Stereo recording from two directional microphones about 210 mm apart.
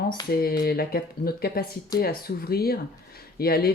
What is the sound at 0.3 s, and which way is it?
Speech, 45° left (ahead or behind).